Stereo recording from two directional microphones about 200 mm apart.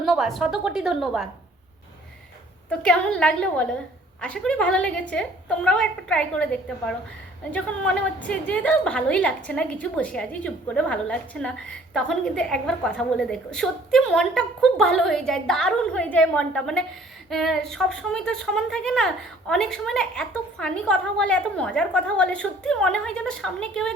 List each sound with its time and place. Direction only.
0.0 s a woman's voice: centre (ahead or behind)
2.6 s a woman's voice: 5° left (ahead or behind)